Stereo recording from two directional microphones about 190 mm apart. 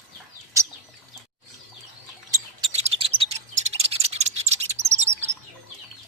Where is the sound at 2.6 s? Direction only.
30° right (ahead or behind).